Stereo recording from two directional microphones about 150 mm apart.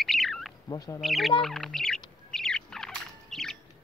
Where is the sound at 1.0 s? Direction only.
Centre (ahead or behind).